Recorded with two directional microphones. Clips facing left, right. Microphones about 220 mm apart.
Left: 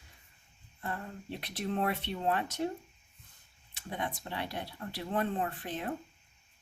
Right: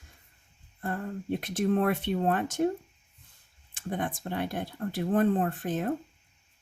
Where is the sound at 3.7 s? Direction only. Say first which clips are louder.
Right 5 dB; 50° right (ahead or behind).